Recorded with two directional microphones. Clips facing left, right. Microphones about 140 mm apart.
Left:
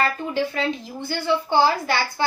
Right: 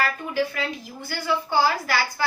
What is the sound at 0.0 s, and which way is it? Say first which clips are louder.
A woman's voice: left 2 dB; 25° left (ahead or behind).